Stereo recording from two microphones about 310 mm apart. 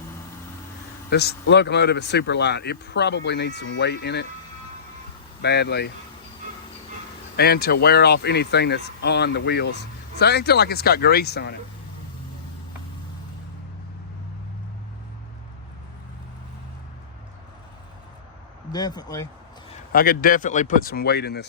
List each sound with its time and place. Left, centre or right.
1.1 s speech: left
5.4 s speech: left
7.3 s speech: left
18.7 s speech: centre
19.9 s speech: left